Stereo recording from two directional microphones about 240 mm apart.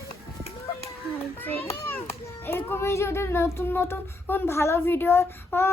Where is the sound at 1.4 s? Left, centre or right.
Centre.